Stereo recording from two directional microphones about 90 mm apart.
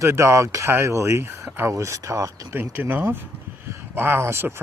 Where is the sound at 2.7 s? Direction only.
20° right (ahead or behind).